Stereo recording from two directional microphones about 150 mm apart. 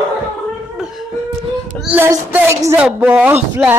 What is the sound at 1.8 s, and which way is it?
Child singing, 10° right (ahead or behind).